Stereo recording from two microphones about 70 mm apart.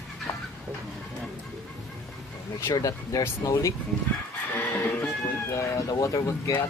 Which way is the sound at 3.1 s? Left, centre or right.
Left.